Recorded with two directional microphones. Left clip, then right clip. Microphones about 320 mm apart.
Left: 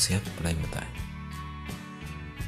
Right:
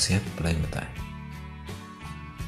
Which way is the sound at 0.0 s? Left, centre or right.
Centre.